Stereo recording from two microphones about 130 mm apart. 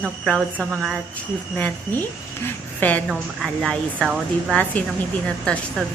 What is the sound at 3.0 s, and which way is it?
A woman's voice, centre (ahead or behind).